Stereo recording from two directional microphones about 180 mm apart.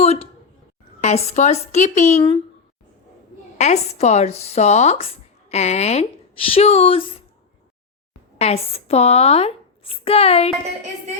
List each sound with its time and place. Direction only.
0.0 s a sound: 35° left (ahead or behind)
1.0 s speech: 35° left (ahead or behind)
3.6 s speech: 40° left (ahead or behind)
8.4 s speech: 35° left (ahead or behind)